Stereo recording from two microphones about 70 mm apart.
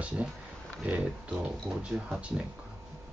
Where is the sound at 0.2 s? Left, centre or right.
Right.